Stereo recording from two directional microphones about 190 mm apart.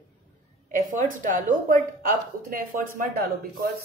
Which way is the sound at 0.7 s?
40° right (ahead or behind).